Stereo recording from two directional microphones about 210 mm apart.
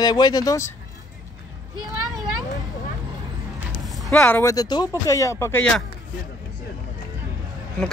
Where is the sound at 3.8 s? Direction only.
Centre (ahead or behind).